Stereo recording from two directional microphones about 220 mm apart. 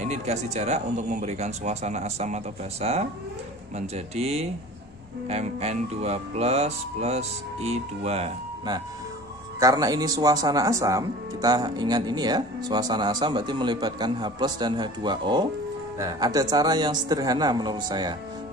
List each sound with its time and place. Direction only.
0.0 s speech: 30° right (ahead or behind)